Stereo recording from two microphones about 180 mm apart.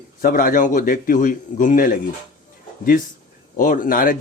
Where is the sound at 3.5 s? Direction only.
50° left (ahead or behind).